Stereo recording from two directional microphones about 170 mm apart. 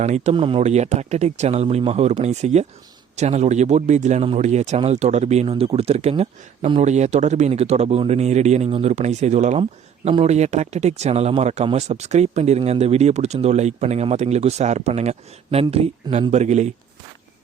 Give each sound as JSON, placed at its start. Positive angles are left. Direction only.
{"t": 0.0, "sound": "a man's voice", "side_deg": -40}